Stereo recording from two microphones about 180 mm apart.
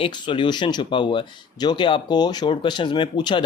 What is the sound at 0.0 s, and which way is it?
Speech, 30° left (ahead or behind).